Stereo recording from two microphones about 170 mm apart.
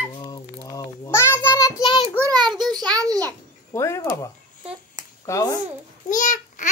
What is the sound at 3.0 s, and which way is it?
Speech, 20° right (ahead or behind).